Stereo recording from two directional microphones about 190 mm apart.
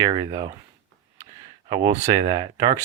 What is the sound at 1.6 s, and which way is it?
Speech, 25° right (ahead or behind).